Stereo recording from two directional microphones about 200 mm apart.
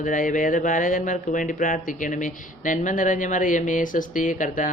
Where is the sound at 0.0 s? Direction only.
40° left (ahead or behind).